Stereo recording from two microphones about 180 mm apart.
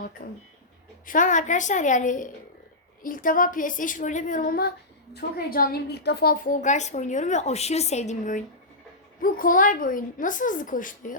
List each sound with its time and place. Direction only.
0.2 s a woman's voice: 55° left (ahead or behind)